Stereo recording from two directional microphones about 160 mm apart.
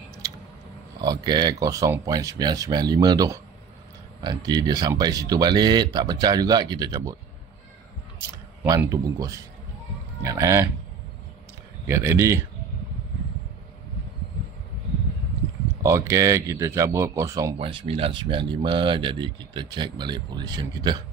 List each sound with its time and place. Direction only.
1.0 s speech: 25° right (ahead or behind)
8.6 s speech: 20° right (ahead or behind)
11.8 s speech: 15° right (ahead or behind)
15.8 s speech: 15° right (ahead or behind)
17.6 s speech: 35° right (ahead or behind)